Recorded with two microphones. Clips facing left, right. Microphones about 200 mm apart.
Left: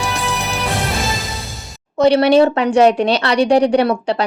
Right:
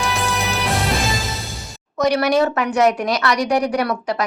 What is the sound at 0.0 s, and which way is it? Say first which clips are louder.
Music: even; centre (ahead or behind).